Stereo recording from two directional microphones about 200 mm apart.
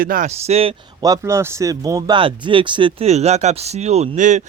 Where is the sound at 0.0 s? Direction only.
45° right (ahead or behind).